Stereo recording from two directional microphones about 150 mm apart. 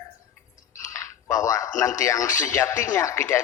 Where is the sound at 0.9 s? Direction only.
20° left (ahead or behind).